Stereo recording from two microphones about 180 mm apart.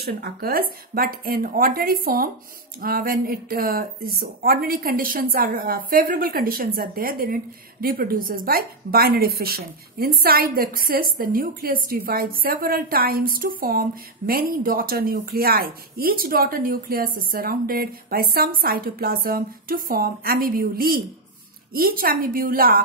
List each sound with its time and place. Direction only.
0.0 s a woman's voice: 60° right (ahead or behind)